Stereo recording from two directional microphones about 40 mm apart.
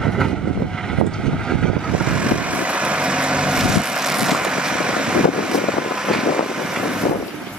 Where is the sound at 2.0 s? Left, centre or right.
Right.